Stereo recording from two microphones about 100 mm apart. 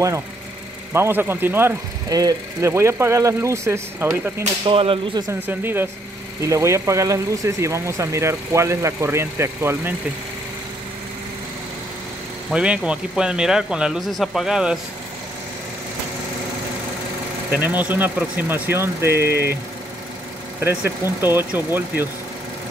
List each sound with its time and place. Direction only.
0.9 s speech: 25° right (ahead or behind)
2.0 s speech: 35° right (ahead or behind)
4.6 s whip: 65° right (ahead or behind)
5.5 s speech: 20° right (ahead or behind)
12.5 s speech: 10° right (ahead or behind)
17.5 s speech: 20° right (ahead or behind)
20.6 s speech: 25° right (ahead or behind)